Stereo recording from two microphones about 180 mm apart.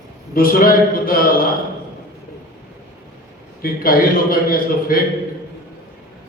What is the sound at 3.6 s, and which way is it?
Mantra, 55° left (ahead or behind).